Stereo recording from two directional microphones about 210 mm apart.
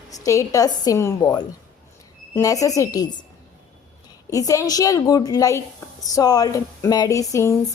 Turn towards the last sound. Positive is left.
turn(degrees=15)  # may be behind; listen again after turning